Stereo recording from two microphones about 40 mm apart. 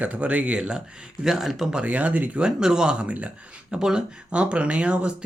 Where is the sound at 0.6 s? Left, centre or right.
Centre.